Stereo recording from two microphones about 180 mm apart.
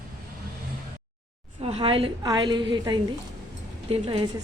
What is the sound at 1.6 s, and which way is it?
A woman's voice, 35° right (ahead or behind).